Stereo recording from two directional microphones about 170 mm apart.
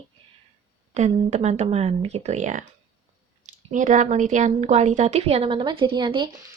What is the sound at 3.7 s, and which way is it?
A woman's voice, 50° right (ahead or behind).